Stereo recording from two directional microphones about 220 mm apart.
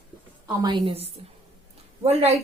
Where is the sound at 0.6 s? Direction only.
25° right (ahead or behind).